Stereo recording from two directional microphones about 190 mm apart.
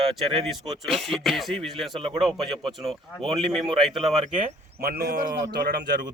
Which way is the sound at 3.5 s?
Centre (ahead or behind).